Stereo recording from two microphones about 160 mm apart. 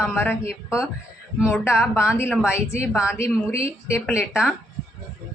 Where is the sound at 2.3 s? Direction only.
5° right (ahead or behind).